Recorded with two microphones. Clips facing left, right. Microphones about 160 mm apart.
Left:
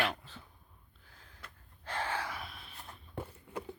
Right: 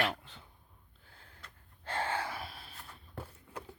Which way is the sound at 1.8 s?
30° right (ahead or behind).